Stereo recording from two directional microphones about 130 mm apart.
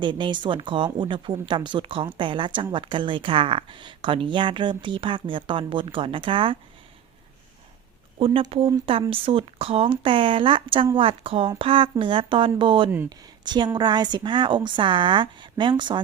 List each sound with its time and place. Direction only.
0.0 s speech: 35° right (ahead or behind)
8.4 s speech: 45° right (ahead or behind)